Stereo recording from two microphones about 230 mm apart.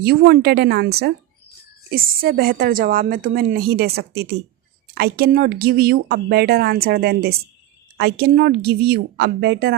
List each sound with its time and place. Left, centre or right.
0.0 s a woman's voice: right